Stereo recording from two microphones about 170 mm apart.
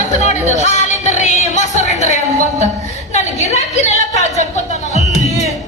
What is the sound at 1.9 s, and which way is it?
A woman's voice, 45° left (ahead or behind).